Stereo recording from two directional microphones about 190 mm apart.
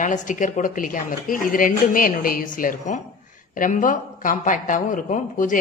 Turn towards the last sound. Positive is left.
turn(degrees=45)  # may be behind; listen again after turning